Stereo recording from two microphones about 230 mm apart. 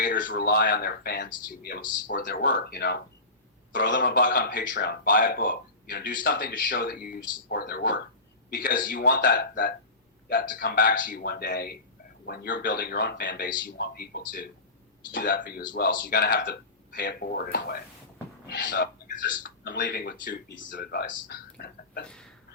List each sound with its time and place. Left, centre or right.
0.0 s a sound: left
0.3 s speech: left
4.0 s speech: left
15.6 s speech: left
16.0 s speech: left
19.6 s speech: left
20.7 s speech: left
22.0 s a sound: centre